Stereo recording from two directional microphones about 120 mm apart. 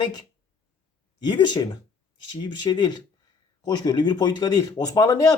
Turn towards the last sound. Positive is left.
turn(degrees=30)  # may be behind; listen again after turning